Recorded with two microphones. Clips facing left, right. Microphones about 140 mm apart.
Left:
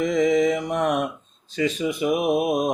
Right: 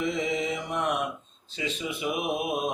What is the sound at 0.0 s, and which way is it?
Mantra, 45° left (ahead or behind).